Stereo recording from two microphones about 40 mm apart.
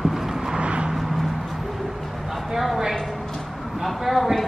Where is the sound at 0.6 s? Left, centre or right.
Right.